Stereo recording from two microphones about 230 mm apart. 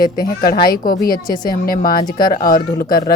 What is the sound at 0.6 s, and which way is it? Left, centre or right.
Speech, left.